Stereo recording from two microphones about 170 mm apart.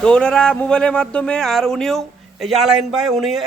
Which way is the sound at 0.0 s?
5° left (ahead or behind).